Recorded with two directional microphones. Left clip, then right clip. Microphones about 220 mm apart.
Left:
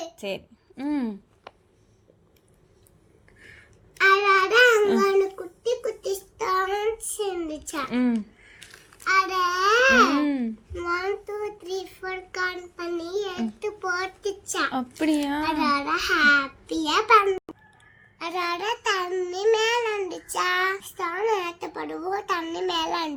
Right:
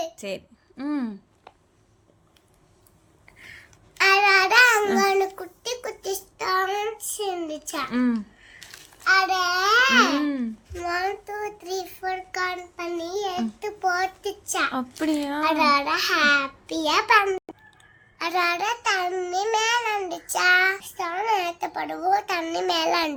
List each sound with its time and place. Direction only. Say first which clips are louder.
0.2 s a woman's voice: left 1 dB; centre (ahead or behind)
1.5 s a sound: left 3 dB; 50° left (ahead or behind)
3.9 s child singing: right 1 dB; 35° right (ahead or behind)
4.9 s a sound: even; 35° right (ahead or behind)
6.4 s a child's voice: even; 15° right (ahead or behind)
7.9 s a sound: left 1 dB; centre (ahead or behind)
9.0 s child singing: right 2 dB; 15° right (ahead or behind)
10.2 s a child's voice: left 1 dB; centre (ahead or behind)
10.9 s child singing: right 1 dB; 25° right (ahead or behind)
14.7 s speech: left 1 dB; centre (ahead or behind)
15.4 s a child's voice: right 6 dB; 30° right (ahead or behind)